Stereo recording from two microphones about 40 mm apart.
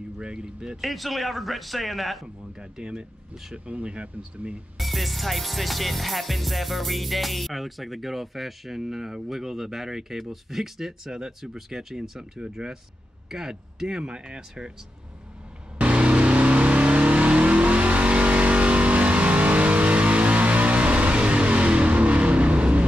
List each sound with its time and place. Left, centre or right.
0.2 s speech: right
0.7 s music: centre
2.6 s speech: right
4.7 s music: centre
13.3 s speech: centre
15.8 s vehicle: right